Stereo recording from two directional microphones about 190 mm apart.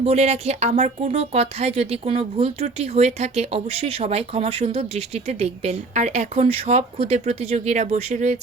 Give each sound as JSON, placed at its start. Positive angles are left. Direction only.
{"t": 0.0, "sound": "a woman's voice", "side_deg": -35}